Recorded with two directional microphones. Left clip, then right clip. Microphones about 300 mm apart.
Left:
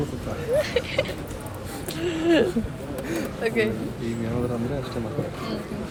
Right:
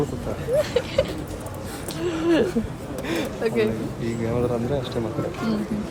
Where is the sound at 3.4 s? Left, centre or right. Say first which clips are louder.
Right 1 dB; centre.